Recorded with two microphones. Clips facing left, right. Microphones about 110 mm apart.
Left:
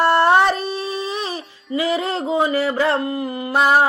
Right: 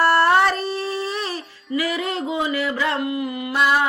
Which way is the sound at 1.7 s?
30° left (ahead or behind).